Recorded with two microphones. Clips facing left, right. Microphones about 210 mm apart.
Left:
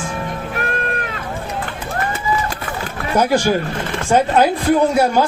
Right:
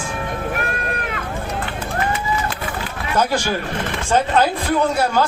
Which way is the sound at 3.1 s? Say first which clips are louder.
Left 4 dB; 15° left (ahead or behind).